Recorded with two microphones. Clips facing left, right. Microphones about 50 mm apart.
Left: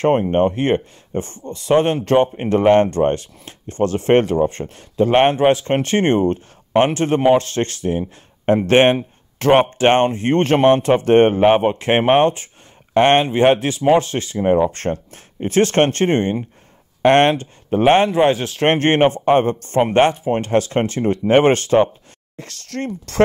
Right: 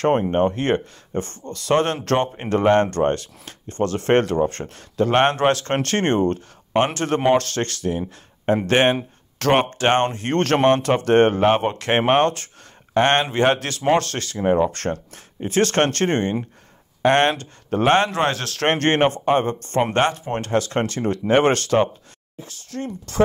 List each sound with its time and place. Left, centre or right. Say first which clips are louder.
0.0 s speech: left 3 dB; centre
14.7 s speech: left 3 dB; left
17.0 s speech: left 4 dB; left
17.3 s speech: left 4 dB; left
22.4 s speech: left 4 dB; left